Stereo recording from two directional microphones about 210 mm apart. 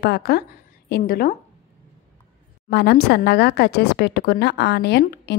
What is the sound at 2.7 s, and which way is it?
A woman's voice, 50° left (ahead or behind).